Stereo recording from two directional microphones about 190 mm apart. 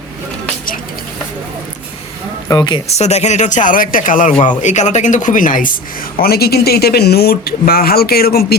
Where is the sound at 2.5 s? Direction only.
20° left (ahead or behind); by 5.7 s 45° left (ahead or behind).